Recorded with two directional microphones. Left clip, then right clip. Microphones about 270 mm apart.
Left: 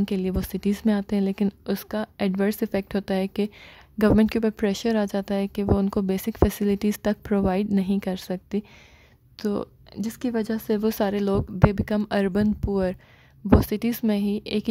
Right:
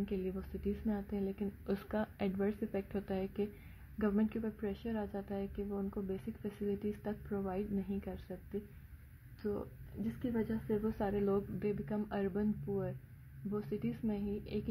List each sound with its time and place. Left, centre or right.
0.0 s a woman's voice: left